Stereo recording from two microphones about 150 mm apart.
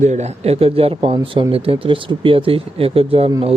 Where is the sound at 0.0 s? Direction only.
50° right (ahead or behind).